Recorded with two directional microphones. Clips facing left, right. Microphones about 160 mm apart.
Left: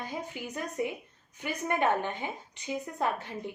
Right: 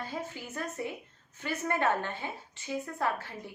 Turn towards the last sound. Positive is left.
turn(degrees=20)  # may be behind; listen again after turning